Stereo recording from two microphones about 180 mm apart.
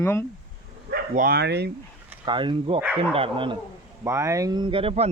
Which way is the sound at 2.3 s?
25° right (ahead or behind).